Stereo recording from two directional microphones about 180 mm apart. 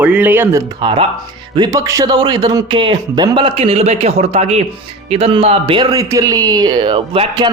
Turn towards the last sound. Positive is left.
turn(degrees=-30)  # may be behind; listen again after turning